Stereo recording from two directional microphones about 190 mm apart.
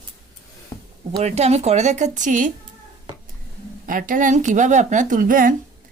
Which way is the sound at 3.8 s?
45° right (ahead or behind).